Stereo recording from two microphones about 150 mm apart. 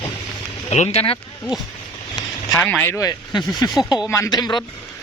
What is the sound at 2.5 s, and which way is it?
Speech, 5° left (ahead or behind).